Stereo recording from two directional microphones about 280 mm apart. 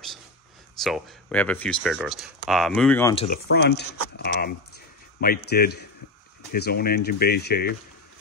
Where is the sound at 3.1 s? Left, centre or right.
Left.